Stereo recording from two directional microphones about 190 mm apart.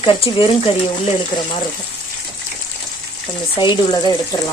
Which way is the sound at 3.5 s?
25° left (ahead or behind).